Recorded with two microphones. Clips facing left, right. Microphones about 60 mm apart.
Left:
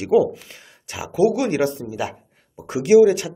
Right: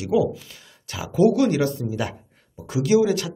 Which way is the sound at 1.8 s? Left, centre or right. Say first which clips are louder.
Even; centre.